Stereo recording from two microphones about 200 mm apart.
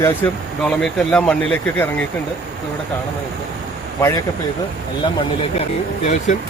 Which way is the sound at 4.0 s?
15° left (ahead or behind).